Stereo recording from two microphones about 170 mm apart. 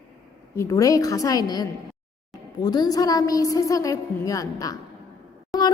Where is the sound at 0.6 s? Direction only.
20° left (ahead or behind).